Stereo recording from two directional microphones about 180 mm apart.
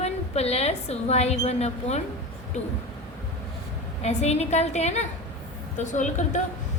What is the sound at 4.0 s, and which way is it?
A woman's voice, 35° left (ahead or behind).